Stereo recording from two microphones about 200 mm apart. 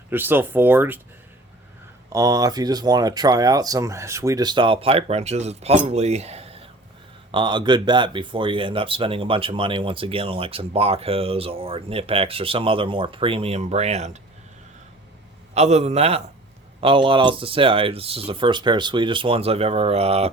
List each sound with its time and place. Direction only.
0.1 s speech: 10° right (ahead or behind)
2.0 s speech: 15° right (ahead or behind); by 14.2 s 35° right (ahead or behind)
15.5 s a man's voice: 35° right (ahead or behind)